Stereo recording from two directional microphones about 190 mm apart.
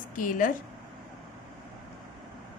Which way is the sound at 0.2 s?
45° left (ahead or behind).